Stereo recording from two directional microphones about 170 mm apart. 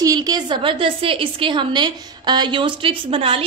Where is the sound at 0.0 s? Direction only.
20° right (ahead or behind).